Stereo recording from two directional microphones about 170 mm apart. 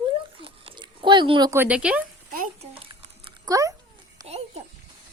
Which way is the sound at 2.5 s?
35° right (ahead or behind).